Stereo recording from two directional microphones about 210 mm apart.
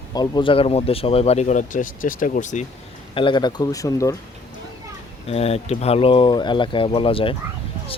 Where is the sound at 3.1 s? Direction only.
25° left (ahead or behind).